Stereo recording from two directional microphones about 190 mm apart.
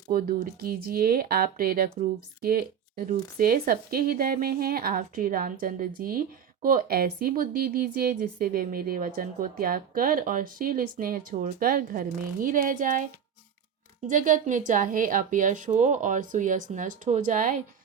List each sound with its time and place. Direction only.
0.1 s a woman's voice: 50° right (ahead or behind)
14.1 s a woman's voice: 45° right (ahead or behind)